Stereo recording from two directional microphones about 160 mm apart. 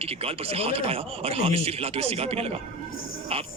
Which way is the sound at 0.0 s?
40° right (ahead or behind).